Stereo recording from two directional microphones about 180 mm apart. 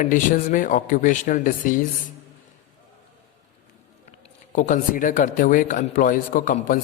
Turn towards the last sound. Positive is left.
turn(degrees=50)  # may be behind; listen again after turning